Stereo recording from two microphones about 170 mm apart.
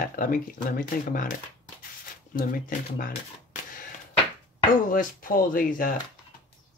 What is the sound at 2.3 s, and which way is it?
Speech, 55° left (ahead or behind).